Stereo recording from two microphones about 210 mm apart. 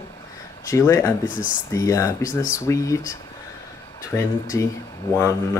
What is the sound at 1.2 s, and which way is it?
Speech, 40° left (ahead or behind).